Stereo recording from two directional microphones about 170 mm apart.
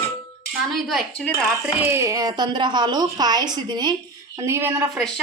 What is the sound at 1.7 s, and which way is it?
A woman's voice, 15° right (ahead or behind).